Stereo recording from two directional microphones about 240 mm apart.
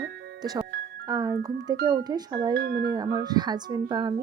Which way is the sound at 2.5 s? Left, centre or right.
Right.